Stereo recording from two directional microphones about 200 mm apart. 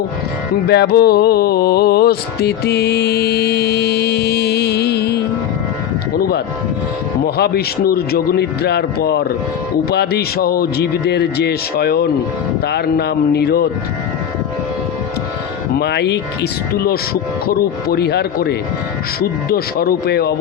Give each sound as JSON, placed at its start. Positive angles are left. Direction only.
{"t": 0.7, "sound": "music", "side_deg": 55}
{"t": 6.1, "sound": "speech", "side_deg": 50}
{"t": 15.8, "sound": "music", "side_deg": 55}
{"t": 17.4, "sound": "speech", "side_deg": 50}